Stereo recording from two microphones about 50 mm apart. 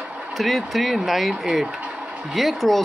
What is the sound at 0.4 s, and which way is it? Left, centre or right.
Speech, centre.